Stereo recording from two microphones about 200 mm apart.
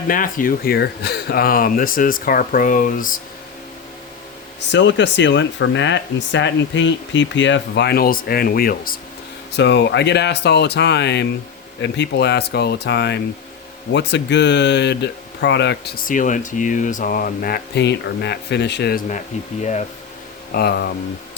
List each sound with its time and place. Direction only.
0.1 s speech: 45° left (ahead or behind)
4.7 s speech: 65° left (ahead or behind); by 9.0 s 45° left (ahead or behind)
9.6 s speech: 60° left (ahead or behind); by 19.2 s 40° left (ahead or behind)
20.5 s speech: 55° left (ahead or behind)